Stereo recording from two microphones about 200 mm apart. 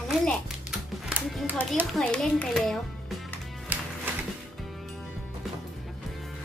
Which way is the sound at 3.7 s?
10° right (ahead or behind).